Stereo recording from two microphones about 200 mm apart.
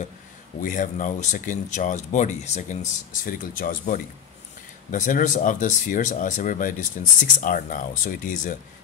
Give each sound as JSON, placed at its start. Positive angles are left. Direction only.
{"t": 0.6, "sound": "speech", "side_deg": 40}